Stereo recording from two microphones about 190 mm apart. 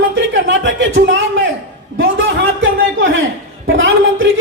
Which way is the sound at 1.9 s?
90° right.